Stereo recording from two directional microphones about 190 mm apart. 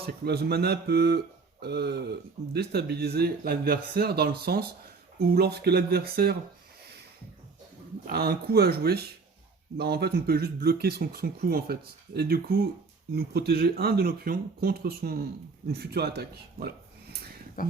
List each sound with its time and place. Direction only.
0.0 s speech: 60° right (ahead or behind)
8.0 s speech: 55° right (ahead or behind)
17.6 s speech: 50° left (ahead or behind)